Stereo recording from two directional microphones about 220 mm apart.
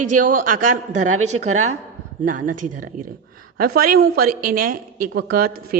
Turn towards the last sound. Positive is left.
turn(degrees=-40)  # may be behind; listen again after turning